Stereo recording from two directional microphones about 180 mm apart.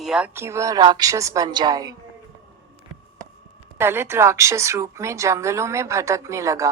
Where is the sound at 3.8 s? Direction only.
15° right (ahead or behind).